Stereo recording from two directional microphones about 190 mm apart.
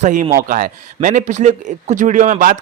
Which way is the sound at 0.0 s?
40° right (ahead or behind).